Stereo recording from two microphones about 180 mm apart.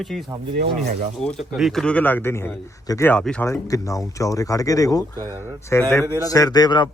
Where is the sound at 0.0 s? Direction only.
Centre (ahead or behind).